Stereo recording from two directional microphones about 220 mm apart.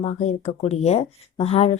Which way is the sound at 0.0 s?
30° left (ahead or behind).